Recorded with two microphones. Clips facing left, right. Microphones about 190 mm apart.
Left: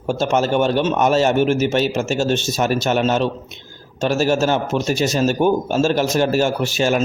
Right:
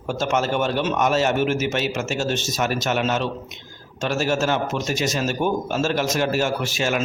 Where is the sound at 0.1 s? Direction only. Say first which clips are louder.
Left 4 dB; 30° left (ahead or behind).